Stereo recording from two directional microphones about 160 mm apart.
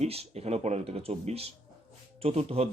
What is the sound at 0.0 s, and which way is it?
Speech, 40° right (ahead or behind).